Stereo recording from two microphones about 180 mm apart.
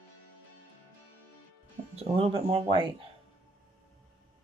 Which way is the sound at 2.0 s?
35° right (ahead or behind).